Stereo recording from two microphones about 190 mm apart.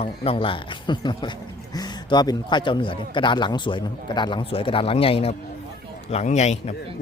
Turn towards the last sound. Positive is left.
turn(degrees=35)  # may be behind; listen again after turning